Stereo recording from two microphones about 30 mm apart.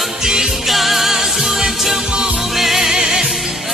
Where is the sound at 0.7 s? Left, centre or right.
Centre.